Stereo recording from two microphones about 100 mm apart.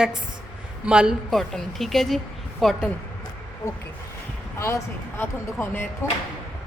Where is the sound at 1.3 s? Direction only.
Centre (ahead or behind).